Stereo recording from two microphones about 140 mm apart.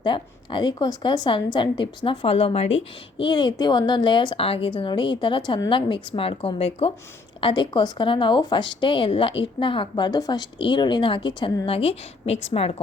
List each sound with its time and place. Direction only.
0.0 s speech: 35° left (ahead or behind)
3.2 s speech: 35° left (ahead or behind)
7.4 s speech: 35° left (ahead or behind)